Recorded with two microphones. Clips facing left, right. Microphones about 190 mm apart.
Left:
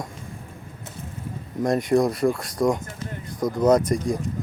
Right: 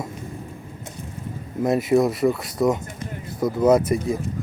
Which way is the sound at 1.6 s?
5° right (ahead or behind).